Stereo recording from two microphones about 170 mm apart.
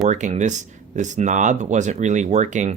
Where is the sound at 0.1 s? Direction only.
45° right (ahead or behind).